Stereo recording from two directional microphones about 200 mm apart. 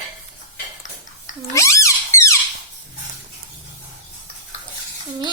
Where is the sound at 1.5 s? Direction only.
15° left (ahead or behind).